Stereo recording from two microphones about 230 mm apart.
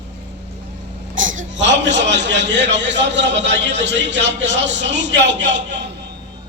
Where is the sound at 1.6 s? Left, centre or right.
Right.